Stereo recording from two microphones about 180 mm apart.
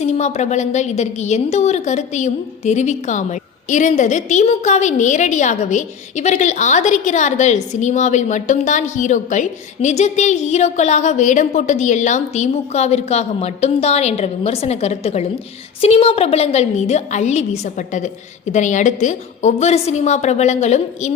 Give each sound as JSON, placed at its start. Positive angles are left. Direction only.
{"t": 0.0, "sound": "a woman's voice", "side_deg": 40}